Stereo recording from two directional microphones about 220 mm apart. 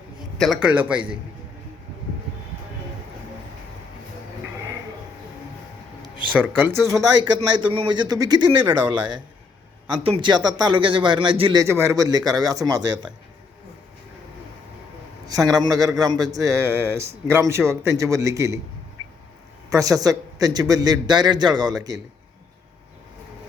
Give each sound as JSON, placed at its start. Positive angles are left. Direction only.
{"t": 0.3, "sound": "a man's voice", "side_deg": 0}
{"t": 6.9, "sound": "a man's voice", "side_deg": -20}
{"t": 11.6, "sound": "speech", "side_deg": -15}
{"t": 15.5, "sound": "speech", "side_deg": -15}
{"t": 19.7, "sound": "speech", "side_deg": -15}